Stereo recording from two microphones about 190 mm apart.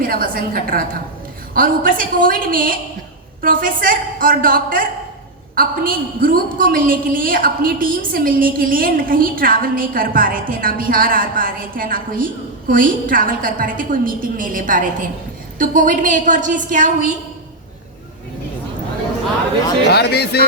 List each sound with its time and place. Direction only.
0.0 s a woman's voice: 50° right (ahead or behind)
19.9 s speech: 60° left (ahead or behind)